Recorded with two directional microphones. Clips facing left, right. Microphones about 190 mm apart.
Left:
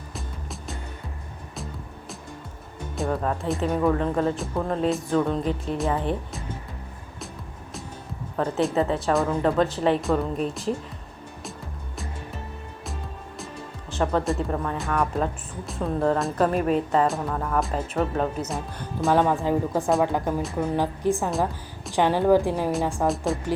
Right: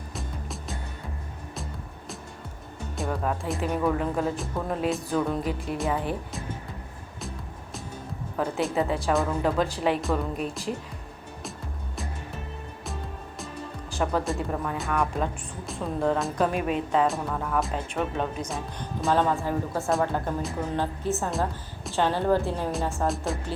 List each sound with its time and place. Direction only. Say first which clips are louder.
0.1 s music: right 1 dB; centre (ahead or behind)
2.9 s speech: left 3 dB; centre (ahead or behind)
8.4 s speech: left 3 dB; centre (ahead or behind)
12.8 s music: even; centre (ahead or behind)
14.0 s a woman's voice: left 3 dB; 5° right (ahead or behind); by 23.0 s 15° left (ahead or behind)
23.0 s speech: left 4 dB; centre (ahead or behind)